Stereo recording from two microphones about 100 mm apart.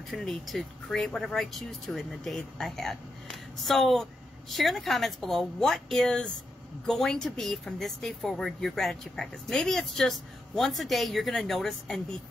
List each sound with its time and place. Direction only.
0.1 s speech: 5° left (ahead or behind)